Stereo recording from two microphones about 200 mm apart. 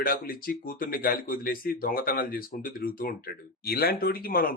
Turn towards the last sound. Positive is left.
turn(degrees=45)  # may be behind; listen again after turning